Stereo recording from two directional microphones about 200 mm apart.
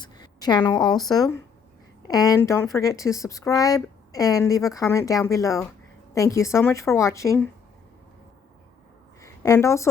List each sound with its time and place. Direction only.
0.0 s a sound: 20° left (ahead or behind)
1.1 s speech: 20° left (ahead or behind)
9.2 s a woman's voice: 15° left (ahead or behind)